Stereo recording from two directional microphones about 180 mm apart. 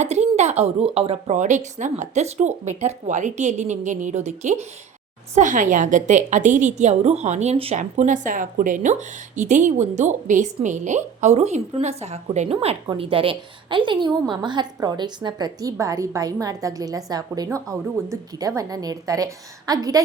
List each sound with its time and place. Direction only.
0.0 s a woman's voice: 40° right (ahead or behind)
7.8 s a woman's voice: 45° right (ahead or behind); by 20.0 s 20° right (ahead or behind)